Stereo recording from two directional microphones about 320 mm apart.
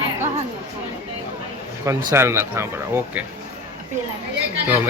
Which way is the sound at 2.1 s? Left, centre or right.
Centre.